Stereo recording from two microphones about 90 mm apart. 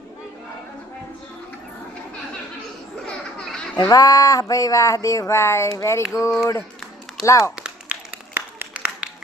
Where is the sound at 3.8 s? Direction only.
40° left (ahead or behind).